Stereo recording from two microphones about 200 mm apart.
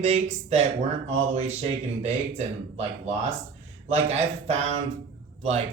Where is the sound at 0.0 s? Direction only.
30° right (ahead or behind).